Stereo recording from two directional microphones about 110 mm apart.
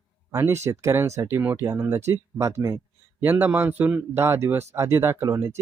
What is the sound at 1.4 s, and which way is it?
Speech, 15° right (ahead or behind).